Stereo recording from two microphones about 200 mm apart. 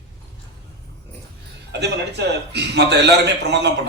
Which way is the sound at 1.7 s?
60° right (ahead or behind).